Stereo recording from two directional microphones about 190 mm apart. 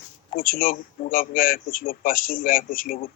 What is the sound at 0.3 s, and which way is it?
A man's voice, 50° left (ahead or behind).